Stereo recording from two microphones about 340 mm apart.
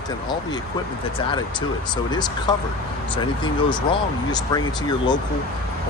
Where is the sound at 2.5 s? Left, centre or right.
Centre.